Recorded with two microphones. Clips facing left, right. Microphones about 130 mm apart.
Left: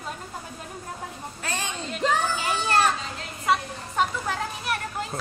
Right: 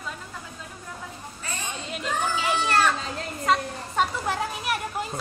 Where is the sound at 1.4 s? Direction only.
90° left.